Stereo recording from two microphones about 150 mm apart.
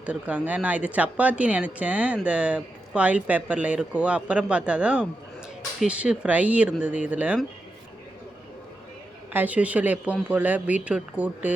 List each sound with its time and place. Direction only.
0.0 s speech: 10° right (ahead or behind)
9.3 s speech: 10° right (ahead or behind)